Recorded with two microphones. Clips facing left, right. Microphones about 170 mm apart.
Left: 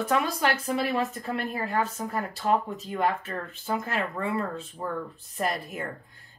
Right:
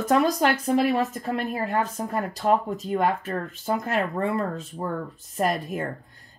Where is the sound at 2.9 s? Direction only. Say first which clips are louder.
Right 4 dB; 40° right (ahead or behind).